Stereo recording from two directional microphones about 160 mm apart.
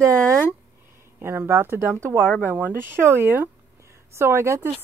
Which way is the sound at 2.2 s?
10° left (ahead or behind).